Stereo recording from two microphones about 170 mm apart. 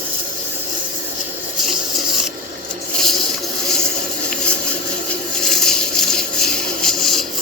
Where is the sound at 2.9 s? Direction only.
Centre (ahead or behind).